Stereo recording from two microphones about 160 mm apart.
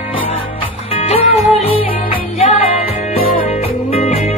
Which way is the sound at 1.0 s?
40° left (ahead or behind).